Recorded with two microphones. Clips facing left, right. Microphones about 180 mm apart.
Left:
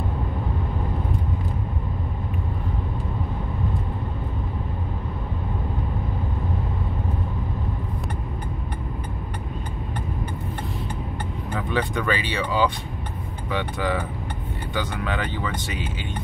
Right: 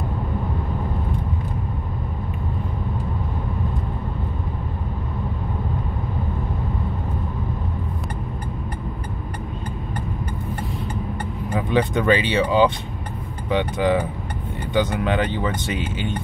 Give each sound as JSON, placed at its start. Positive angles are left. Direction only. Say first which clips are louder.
{"t": 11.5, "sound": "speech", "louder": "right 5 dB", "side_deg": -20}